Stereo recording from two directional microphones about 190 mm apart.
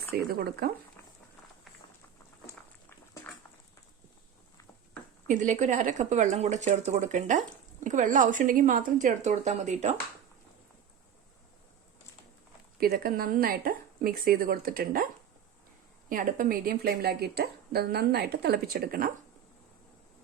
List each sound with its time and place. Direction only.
0.3 s speech: 55° right (ahead or behind)
5.3 s a woman's voice: 40° right (ahead or behind)
12.8 s a woman's voice: 50° right (ahead or behind)
16.0 s speech: 45° right (ahead or behind)